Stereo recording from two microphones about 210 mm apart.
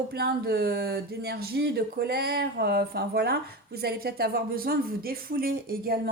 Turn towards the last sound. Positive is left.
turn(degrees=-45)  # may be behind; listen again after turning